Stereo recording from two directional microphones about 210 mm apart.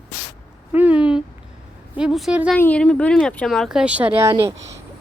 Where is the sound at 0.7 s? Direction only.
5° right (ahead or behind).